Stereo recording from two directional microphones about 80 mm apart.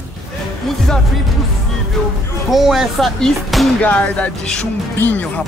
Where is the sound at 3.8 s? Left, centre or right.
Centre.